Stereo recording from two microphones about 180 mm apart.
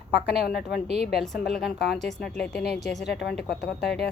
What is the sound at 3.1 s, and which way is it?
Speech, 65° left (ahead or behind).